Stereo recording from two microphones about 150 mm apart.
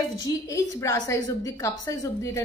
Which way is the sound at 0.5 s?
20° left (ahead or behind).